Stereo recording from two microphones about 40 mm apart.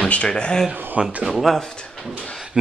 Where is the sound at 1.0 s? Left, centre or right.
Right.